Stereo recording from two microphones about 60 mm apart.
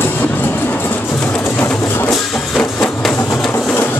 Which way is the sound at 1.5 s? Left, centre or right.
Left.